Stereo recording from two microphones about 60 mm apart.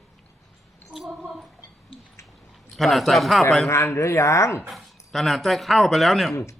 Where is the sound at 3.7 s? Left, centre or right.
Left.